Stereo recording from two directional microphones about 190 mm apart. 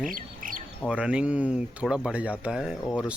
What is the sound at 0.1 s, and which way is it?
Squawk, 45° right (ahead or behind).